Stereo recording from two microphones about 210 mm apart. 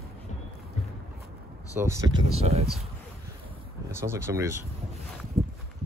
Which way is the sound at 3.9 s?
10° right (ahead or behind).